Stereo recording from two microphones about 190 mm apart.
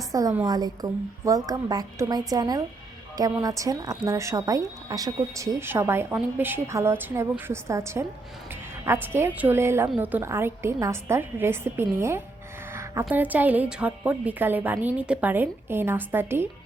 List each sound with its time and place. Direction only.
0.1 s a woman's voice: 20° right (ahead or behind)